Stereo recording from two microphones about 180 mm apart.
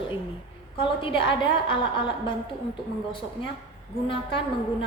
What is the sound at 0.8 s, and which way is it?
Speech, 30° left (ahead or behind).